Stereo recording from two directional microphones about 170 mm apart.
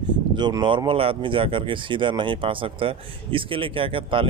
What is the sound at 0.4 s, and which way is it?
Speech, 25° right (ahead or behind).